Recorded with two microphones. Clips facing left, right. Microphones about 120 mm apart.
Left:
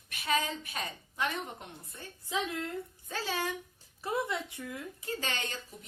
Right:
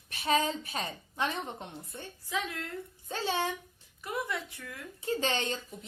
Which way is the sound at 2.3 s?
25° left (ahead or behind).